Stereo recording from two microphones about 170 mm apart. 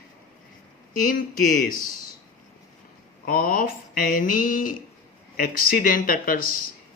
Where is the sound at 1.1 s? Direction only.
55° left (ahead or behind).